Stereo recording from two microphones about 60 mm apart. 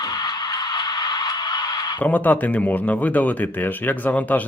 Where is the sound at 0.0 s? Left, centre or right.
Left.